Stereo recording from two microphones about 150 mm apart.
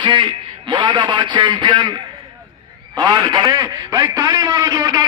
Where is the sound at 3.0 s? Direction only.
25° right (ahead or behind).